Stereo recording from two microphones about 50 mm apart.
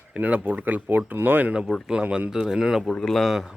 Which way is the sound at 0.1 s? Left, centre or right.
Right.